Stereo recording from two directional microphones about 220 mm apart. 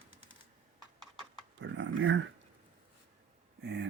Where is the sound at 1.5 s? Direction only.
55° right (ahead or behind).